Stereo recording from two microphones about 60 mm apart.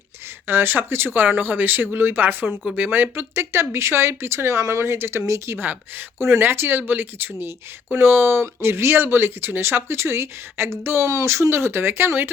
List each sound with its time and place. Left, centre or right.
0.4 s speech: right
5.5 s speech: right